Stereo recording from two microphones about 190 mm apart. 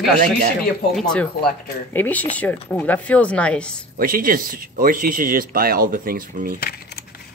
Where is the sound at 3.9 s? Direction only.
50° right (ahead or behind).